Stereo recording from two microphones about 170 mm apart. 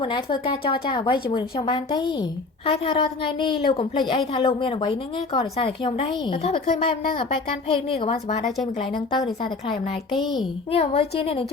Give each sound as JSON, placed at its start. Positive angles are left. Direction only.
{"t": 0.0, "sound": "a woman's voice", "side_deg": 30}
{"t": 9.0, "sound": "a woman's voice", "side_deg": 25}